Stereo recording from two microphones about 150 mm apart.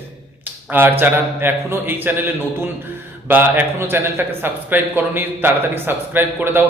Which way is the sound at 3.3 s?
15° right (ahead or behind).